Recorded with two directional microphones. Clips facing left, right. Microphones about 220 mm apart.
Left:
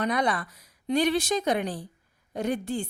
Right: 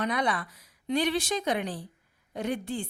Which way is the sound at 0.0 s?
40° left (ahead or behind).